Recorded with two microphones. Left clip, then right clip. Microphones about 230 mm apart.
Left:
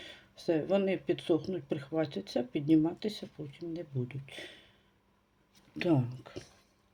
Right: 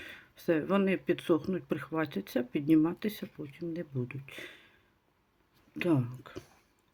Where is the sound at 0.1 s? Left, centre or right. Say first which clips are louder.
Right 1 dB; right.